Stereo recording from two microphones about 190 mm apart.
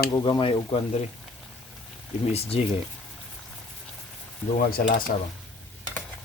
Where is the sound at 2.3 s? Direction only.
30° left (ahead or behind).